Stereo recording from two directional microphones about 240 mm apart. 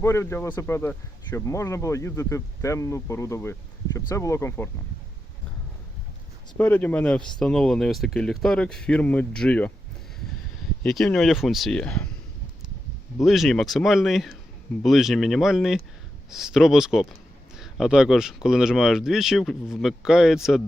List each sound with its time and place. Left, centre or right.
0.0 s speech: centre
6.6 s speech: centre
10.8 s speech: centre
13.2 s speech: centre